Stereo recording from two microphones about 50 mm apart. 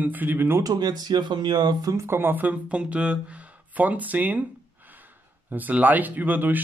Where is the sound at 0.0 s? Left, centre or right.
Right.